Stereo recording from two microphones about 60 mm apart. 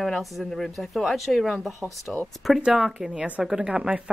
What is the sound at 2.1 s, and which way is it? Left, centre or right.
A woman's voice, centre.